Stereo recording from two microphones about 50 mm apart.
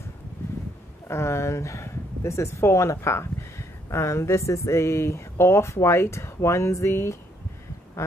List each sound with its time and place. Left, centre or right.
1.0 s speech: left